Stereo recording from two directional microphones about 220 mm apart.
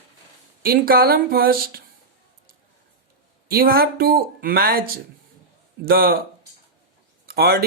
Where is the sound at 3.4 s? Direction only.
40° right (ahead or behind).